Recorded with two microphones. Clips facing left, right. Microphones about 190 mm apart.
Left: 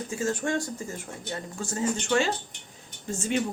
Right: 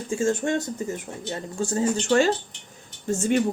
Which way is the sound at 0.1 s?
25° right (ahead or behind).